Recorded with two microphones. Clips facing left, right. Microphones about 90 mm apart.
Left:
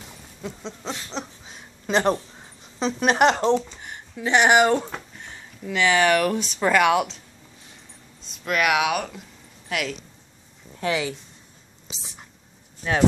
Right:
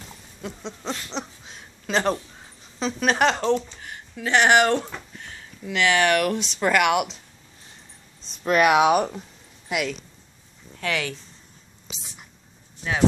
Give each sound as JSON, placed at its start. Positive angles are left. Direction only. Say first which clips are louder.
{"t": 0.5, "sound": "speech", "louder": "right 1 dB", "side_deg": 0}
{"t": 1.9, "sound": "a sound", "louder": "left 2 dB", "side_deg": 15}
{"t": 3.3, "sound": "speech", "louder": "left 2 dB", "side_deg": 30}
{"t": 3.8, "sound": "speech", "louder": "left 2 dB", "side_deg": 10}
{"t": 5.1, "sound": "a sound", "louder": "even", "side_deg": 10}
{"t": 5.7, "sound": "speech", "louder": "left 1 dB", "side_deg": 5}
{"t": 8.5, "sound": "speech", "louder": "right 4 dB", "side_deg": -35}
{"t": 9.7, "sound": "speech", "louder": "right 1 dB", "side_deg": -5}
{"t": 10.8, "sound": "speech", "louder": "left 2 dB", "side_deg": 25}